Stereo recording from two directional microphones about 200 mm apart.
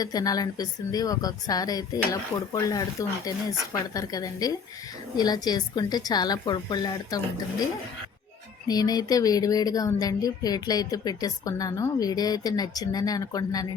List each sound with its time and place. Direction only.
0.0 s speech: 20° left (ahead or behind)
8.6 s speech: 20° left (ahead or behind)